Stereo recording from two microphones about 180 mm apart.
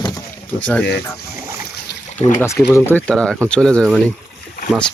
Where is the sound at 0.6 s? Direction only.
5° left (ahead or behind).